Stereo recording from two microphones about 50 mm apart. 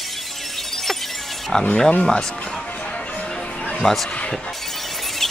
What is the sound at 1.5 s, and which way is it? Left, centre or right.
Speech, centre.